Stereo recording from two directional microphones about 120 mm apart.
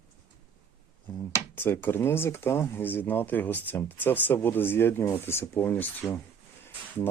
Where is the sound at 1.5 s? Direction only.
20° left (ahead or behind).